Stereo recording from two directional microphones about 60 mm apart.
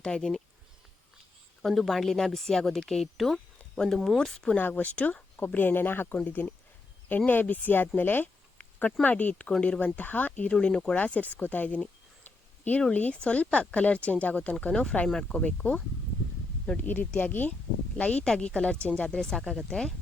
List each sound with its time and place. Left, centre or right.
0.0 s speech: centre
1.6 s speech: centre
4.7 s speech: left
10.9 s speech: left
16.7 s speech: left
17.9 s speech: centre